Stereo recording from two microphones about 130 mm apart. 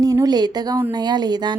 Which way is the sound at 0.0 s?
30° right (ahead or behind).